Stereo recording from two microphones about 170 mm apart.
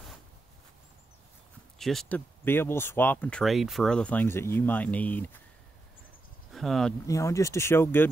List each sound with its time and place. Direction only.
1.8 s speech: centre (ahead or behind)
6.5 s speech: centre (ahead or behind)
7.1 s speech: 20° left (ahead or behind)